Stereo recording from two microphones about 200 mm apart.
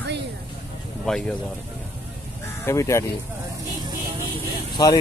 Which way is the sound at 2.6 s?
15° left (ahead or behind).